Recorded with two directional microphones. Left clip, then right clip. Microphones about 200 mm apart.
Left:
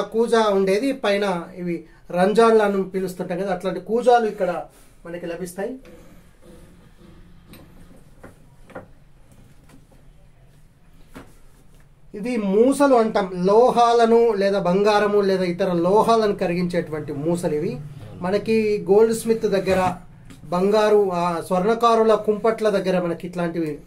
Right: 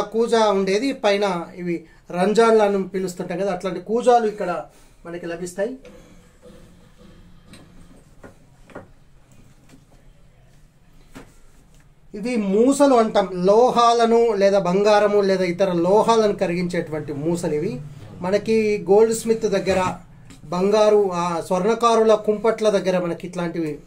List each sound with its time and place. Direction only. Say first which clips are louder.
0.1 s a man's voice: even; 10° right (ahead or behind)
12.2 s a man's voice: left 1 dB; 25° right (ahead or behind); by 23.8 s 10° right (ahead or behind)